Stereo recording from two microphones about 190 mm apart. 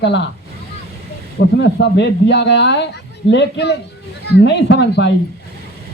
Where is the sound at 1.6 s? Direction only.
65° left (ahead or behind).